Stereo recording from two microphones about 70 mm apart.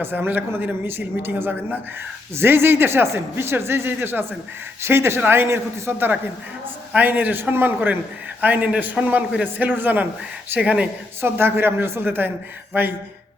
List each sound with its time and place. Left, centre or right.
0.0 s speech: right
6.9 s a man's voice: right
11.2 s a man's voice: right